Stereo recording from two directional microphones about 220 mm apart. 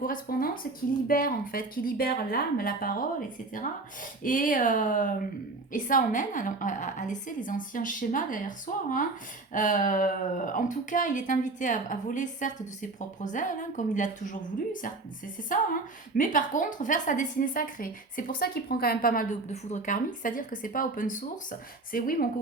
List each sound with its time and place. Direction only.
0.0 s a woman's voice: 40° left (ahead or behind)